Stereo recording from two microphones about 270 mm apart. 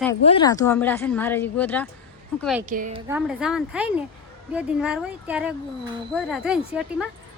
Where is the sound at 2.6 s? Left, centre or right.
Right.